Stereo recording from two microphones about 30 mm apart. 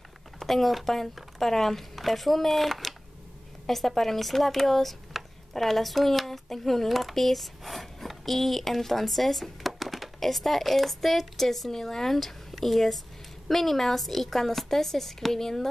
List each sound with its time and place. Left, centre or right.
0.4 s a woman's voice: centre